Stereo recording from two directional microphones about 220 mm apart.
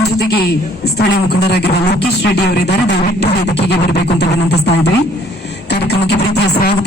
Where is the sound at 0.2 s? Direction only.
45° left (ahead or behind).